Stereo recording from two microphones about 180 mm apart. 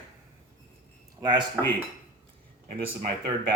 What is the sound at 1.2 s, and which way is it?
Speech, 25° right (ahead or behind).